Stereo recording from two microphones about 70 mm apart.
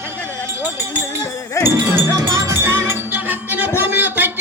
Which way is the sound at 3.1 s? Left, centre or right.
Right.